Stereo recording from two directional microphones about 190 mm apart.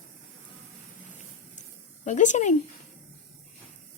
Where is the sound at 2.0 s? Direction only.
40° left (ahead or behind).